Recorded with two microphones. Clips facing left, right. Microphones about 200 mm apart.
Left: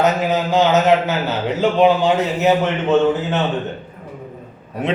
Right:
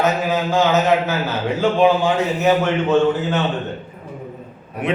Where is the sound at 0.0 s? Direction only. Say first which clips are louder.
Left 2 dB; 20° left (ahead or behind).